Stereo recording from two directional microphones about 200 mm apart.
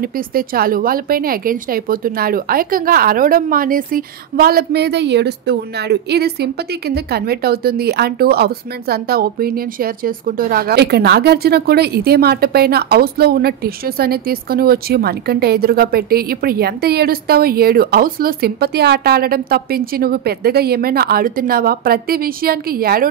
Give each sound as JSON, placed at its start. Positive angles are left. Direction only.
{"t": 0.0, "sound": "speech", "side_deg": -45}